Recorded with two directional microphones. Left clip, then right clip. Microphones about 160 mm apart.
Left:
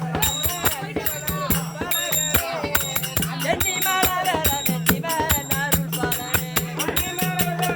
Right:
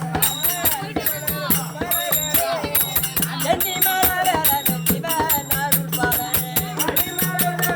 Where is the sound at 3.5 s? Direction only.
10° left (ahead or behind).